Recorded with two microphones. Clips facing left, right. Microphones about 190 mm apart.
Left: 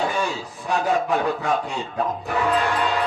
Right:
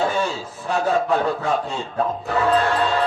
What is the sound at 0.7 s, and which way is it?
Speech, 15° left (ahead or behind).